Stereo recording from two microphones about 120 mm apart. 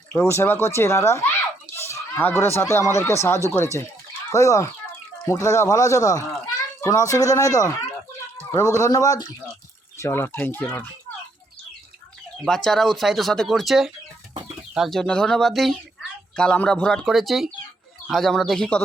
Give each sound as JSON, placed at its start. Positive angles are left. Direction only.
{"t": 0.2, "sound": "speech", "side_deg": 20}
{"t": 12.5, "sound": "speech", "side_deg": 5}